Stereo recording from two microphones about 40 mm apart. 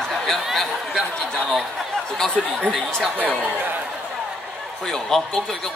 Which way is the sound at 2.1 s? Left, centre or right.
Centre.